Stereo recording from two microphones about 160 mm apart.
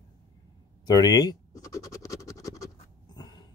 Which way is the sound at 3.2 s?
25° left (ahead or behind).